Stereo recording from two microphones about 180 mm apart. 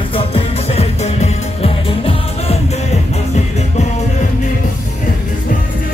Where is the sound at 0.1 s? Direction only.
30° left (ahead or behind).